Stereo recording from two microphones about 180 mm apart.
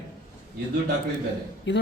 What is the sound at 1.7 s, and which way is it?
Speech, 75° left (ahead or behind).